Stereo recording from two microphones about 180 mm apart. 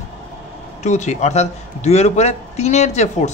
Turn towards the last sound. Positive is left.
turn(degrees=40)  # may be behind; listen again after turning